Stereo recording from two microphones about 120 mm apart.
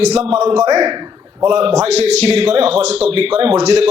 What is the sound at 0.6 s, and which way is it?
A man's voice, 35° right (ahead or behind).